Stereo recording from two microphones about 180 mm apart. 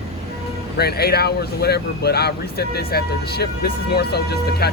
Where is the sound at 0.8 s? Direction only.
60° left (ahead or behind).